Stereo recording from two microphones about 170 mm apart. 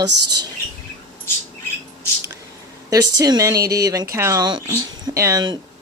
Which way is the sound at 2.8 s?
20° right (ahead or behind).